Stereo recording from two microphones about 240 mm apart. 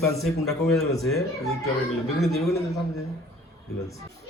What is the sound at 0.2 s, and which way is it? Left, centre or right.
Speech, centre.